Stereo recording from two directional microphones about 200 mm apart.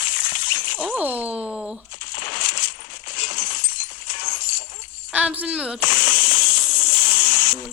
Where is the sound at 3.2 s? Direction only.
45° left (ahead or behind).